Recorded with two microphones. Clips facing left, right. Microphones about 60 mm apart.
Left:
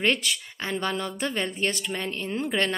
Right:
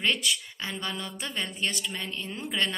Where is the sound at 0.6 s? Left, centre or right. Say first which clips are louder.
Left 10 dB; left.